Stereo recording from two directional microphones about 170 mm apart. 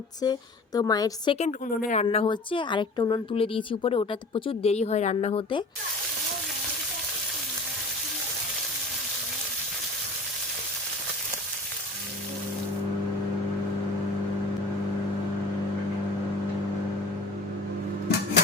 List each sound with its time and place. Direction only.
0.2 s a woman's voice: 20° left (ahead or behind)
1.4 s a woman's voice: 45° left (ahead or behind)
2.1 s a woman's voice: 30° left (ahead or behind)